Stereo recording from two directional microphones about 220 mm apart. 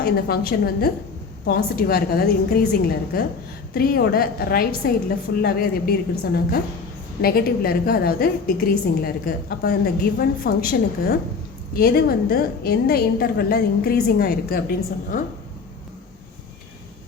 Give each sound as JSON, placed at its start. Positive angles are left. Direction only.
{"t": 0.0, "sound": "a woman's voice", "side_deg": 45}